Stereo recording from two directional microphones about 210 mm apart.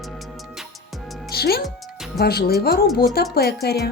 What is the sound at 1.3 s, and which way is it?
Speech, 50° left (ahead or behind).